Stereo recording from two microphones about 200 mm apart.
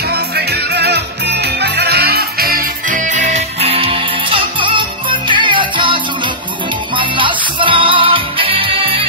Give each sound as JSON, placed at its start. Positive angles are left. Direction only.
{"t": 0.1, "sound": "music", "side_deg": -55}